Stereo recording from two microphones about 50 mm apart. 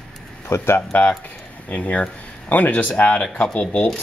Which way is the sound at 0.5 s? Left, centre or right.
Left.